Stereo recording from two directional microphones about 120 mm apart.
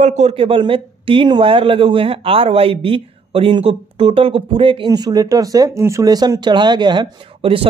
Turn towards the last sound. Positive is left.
turn(degrees=-45)  # may be behind; listen again after turning